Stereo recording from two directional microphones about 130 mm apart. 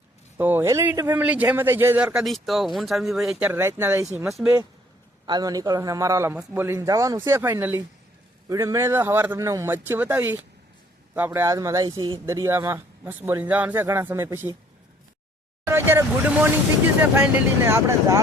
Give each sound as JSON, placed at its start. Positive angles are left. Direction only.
{"t": 0.3, "sound": "a man's voice", "side_deg": -15}
{"t": 4.3, "sound": "speech", "side_deg": 0}
{"t": 5.2, "sound": "a man's voice", "side_deg": -30}
{"t": 6.7, "sound": "a man's voice", "side_deg": -25}
{"t": 11.3, "sound": "a man's voice", "side_deg": -25}
{"t": 15.6, "sound": "a man's voice", "side_deg": -15}